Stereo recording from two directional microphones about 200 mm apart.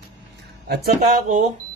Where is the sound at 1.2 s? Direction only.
40° right (ahead or behind).